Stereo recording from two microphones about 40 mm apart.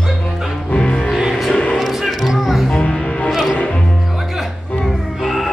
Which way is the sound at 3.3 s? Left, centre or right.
Centre.